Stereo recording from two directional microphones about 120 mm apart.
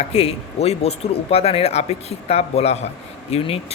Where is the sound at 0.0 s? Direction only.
60° left (ahead or behind).